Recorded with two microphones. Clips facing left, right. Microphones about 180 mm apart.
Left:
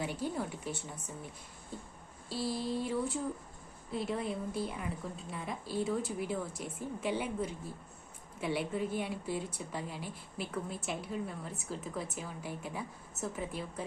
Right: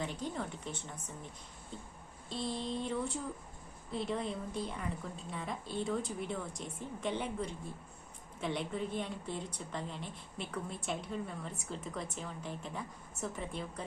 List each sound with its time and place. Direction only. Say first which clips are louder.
0.0 s speech: left 3 dB; 10° left (ahead or behind)
2.3 s a woman's voice: left 3 dB; 5° left (ahead or behind)